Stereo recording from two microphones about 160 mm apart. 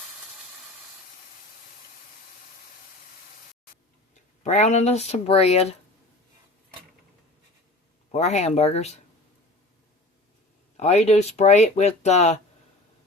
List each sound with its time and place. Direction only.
4.4 s speech: 45° left (ahead or behind)
8.1 s speech: 45° left (ahead or behind)
10.8 s speech: 45° left (ahead or behind)